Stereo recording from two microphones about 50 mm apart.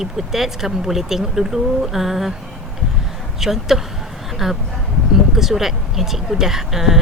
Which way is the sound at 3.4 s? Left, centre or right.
Centre.